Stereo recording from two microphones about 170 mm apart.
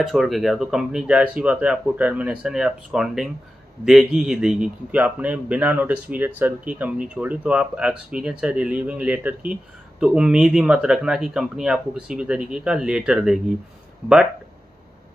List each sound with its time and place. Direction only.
0.0 s a man's voice: centre (ahead or behind)